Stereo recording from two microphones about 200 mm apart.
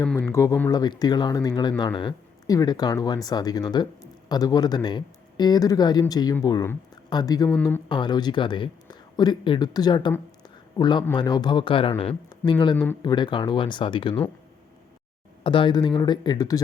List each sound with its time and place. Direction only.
0.0 s speech: 10° left (ahead or behind)
7.5 s speech: 5° left (ahead or behind)
7.9 s speech: 20° left (ahead or behind)
12.7 s speech: 10° left (ahead or behind)
13.0 s speech: 20° left (ahead or behind)
15.4 s speech: 25° left (ahead or behind)